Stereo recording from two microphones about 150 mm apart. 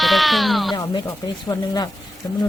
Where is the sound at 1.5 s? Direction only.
25° left (ahead or behind).